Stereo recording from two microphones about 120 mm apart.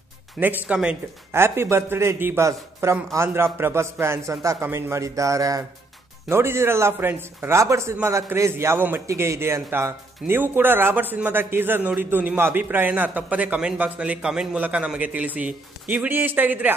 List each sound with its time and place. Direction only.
0.4 s a man's voice: 15° right (ahead or behind)